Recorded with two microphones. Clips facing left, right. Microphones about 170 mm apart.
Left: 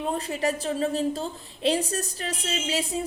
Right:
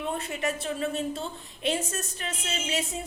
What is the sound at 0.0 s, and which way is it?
A woman's voice, 35° left (ahead or behind).